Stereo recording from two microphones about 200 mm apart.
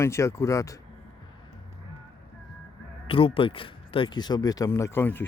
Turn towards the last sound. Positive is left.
turn(degrees=10)  # may be behind; listen again after turning